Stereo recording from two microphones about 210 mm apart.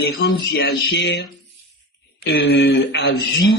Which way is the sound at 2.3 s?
55° left (ahead or behind).